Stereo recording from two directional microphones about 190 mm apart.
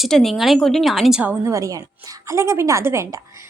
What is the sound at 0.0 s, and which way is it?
A woman's voice, centre (ahead or behind).